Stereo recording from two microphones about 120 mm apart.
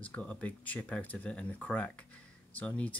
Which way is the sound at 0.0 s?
10° left (ahead or behind).